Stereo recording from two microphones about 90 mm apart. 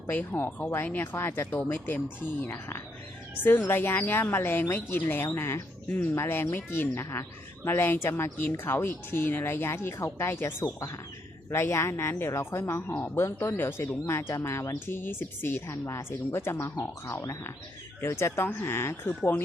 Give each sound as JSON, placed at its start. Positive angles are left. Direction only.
{"t": 0.1, "sound": "speech", "side_deg": 20}